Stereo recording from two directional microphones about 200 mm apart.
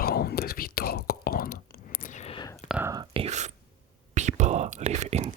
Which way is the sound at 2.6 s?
5° right (ahead or behind).